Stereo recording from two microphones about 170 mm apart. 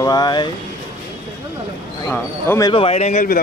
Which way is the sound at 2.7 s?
35° left (ahead or behind).